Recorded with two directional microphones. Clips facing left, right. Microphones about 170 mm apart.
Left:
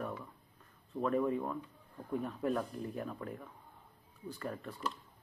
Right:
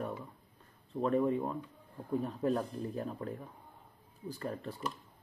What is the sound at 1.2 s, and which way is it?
Speech, 25° right (ahead or behind).